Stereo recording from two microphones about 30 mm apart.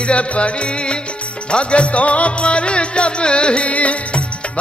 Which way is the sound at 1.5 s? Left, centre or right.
Left.